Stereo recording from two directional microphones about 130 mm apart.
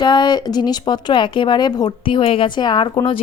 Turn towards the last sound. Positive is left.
turn(degrees=35)  # may be behind; listen again after turning